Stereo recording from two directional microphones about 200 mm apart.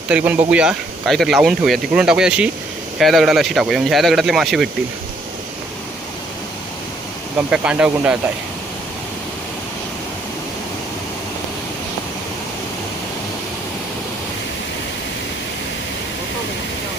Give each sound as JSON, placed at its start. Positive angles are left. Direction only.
{"t": 0.1, "sound": "speech", "side_deg": -5}
{"t": 7.3, "sound": "speech", "side_deg": -5}